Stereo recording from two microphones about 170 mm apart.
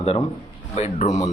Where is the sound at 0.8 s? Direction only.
45° left (ahead or behind).